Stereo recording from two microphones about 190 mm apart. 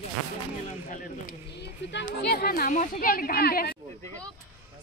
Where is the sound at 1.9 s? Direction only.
65° left (ahead or behind).